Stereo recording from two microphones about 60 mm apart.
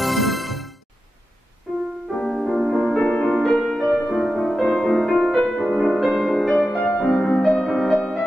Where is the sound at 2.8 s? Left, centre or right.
Centre.